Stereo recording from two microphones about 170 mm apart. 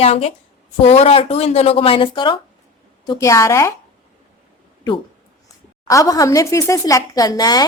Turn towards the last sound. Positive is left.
turn(degrees=25)  # may be behind; listen again after turning